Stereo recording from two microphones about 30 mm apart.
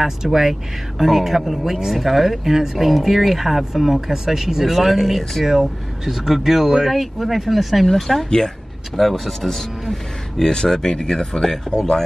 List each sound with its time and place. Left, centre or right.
0.0 s speech: centre
5.5 s speech: centre
7.8 s speech: centre
10.4 s speech: left